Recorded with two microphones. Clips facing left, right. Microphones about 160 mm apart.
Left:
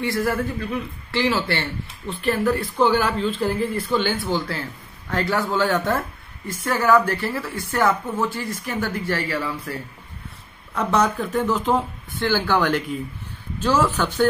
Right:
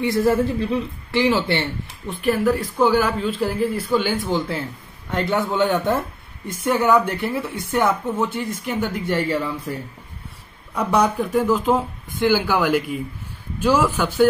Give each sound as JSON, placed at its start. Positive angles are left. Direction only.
{"t": 0.0, "sound": "a woman's voice", "side_deg": -20}